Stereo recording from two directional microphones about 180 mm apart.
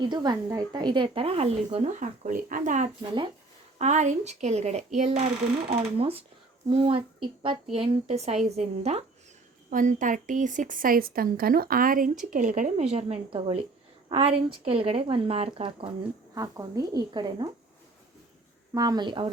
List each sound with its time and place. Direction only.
0.0 s a woman's voice: 25° right (ahead or behind)
16.3 s speech: 20° right (ahead or behind)
18.7 s speech: 20° right (ahead or behind)